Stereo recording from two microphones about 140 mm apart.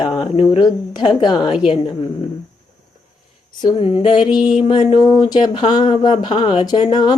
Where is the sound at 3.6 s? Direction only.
40° left (ahead or behind).